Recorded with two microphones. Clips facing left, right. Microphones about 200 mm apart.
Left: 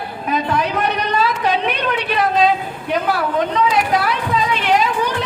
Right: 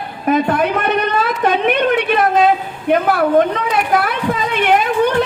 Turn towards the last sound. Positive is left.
turn(degrees=-55)  # may be behind; listen again after turning